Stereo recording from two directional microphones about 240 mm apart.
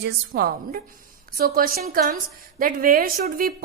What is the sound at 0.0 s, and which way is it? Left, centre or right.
A woman's voice, right.